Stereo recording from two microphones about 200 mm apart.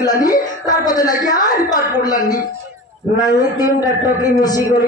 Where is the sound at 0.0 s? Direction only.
20° left (ahead or behind).